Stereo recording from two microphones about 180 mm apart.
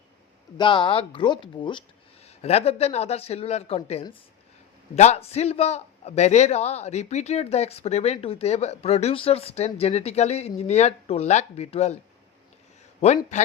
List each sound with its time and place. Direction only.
0.5 s a man's voice: 25° left (ahead or behind)
13.3 s speech: 40° left (ahead or behind)